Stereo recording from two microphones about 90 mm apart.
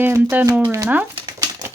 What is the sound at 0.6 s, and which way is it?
Speech, 35° right (ahead or behind).